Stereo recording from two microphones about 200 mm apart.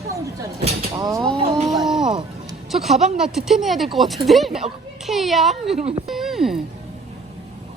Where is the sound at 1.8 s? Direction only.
Centre (ahead or behind).